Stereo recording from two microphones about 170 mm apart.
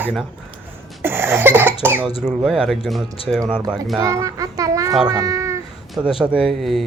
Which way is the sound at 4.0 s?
20° right (ahead or behind).